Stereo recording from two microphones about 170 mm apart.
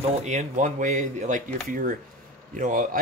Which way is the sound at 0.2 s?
45° right (ahead or behind).